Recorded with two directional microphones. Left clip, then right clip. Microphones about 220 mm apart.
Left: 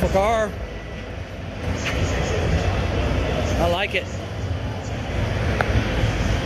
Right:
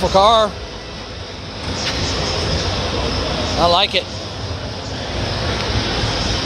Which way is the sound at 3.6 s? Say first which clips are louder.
Right 9 dB; 30° right (ahead or behind).